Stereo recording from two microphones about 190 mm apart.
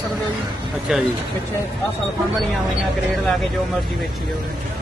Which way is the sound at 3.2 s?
Centre (ahead or behind).